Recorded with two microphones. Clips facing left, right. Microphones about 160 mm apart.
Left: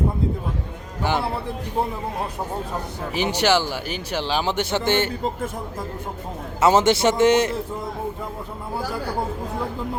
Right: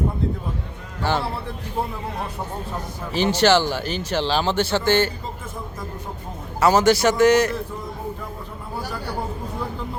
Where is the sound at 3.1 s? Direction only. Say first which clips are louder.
Right 3 dB; 15° left (ahead or behind).